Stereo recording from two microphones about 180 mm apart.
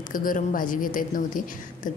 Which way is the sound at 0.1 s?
50° left (ahead or behind).